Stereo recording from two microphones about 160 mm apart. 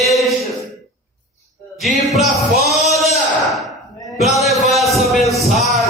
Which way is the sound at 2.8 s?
Centre (ahead or behind).